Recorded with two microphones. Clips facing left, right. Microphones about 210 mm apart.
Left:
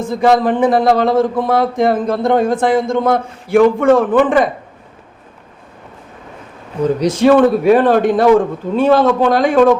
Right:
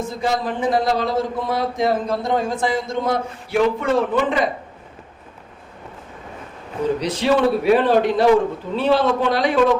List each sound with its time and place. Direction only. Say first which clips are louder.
0.1 s speech: left 10 dB; 55° left (ahead or behind)
6.8 s a man's voice: left 8 dB; 45° left (ahead or behind)